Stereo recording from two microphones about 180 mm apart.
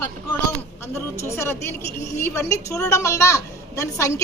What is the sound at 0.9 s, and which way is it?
A woman's voice, 15° left (ahead or behind).